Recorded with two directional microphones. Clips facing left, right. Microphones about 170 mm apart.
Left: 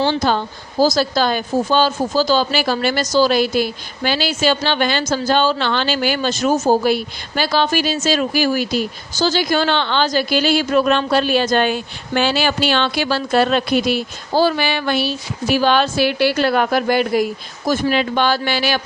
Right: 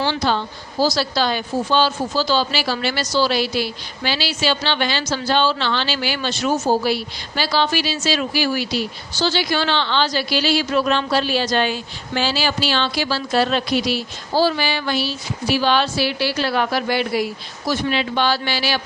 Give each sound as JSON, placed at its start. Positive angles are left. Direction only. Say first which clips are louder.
{"t": 0.1, "sound": "speech", "louder": "left 3 dB", "side_deg": 45}